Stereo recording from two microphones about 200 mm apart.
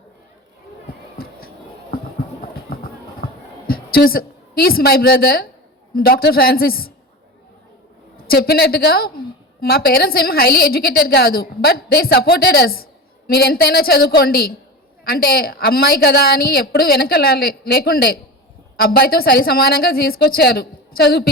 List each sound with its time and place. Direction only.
1.2 s a sound: 50° left (ahead or behind)
2.6 s music: 50° left (ahead or behind)
3.7 s a woman's voice: 50° left (ahead or behind)
8.1 s a woman's voice: 50° left (ahead or behind)